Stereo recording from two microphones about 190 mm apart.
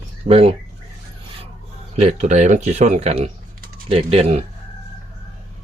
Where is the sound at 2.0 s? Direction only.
35° right (ahead or behind).